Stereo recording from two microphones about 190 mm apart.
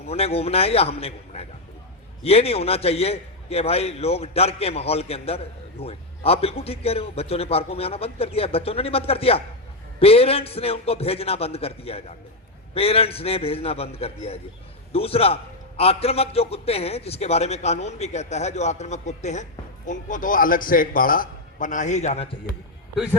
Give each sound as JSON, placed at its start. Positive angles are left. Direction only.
{"t": 0.1, "sound": "a man's voice", "side_deg": 30}